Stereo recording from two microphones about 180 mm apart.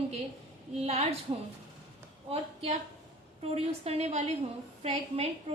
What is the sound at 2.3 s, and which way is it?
A woman's voice, 35° right (ahead or behind).